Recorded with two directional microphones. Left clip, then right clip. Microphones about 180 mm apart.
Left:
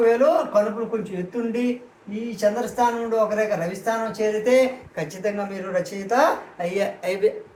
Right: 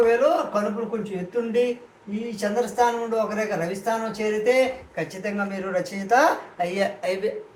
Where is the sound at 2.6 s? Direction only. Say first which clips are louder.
Even; 10° left (ahead or behind).